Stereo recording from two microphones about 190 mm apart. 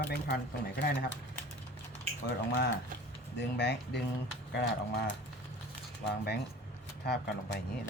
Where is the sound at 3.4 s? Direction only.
65° left (ahead or behind).